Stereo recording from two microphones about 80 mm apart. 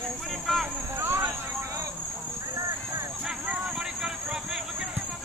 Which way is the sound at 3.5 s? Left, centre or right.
Centre.